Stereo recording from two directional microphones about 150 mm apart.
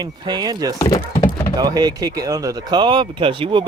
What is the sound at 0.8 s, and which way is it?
Speech, 25° left (ahead or behind).